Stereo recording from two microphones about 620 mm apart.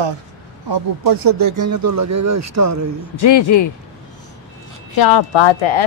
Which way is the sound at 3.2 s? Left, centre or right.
Left.